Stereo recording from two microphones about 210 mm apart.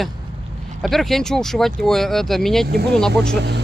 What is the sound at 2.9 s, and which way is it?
Speech, 5° left (ahead or behind).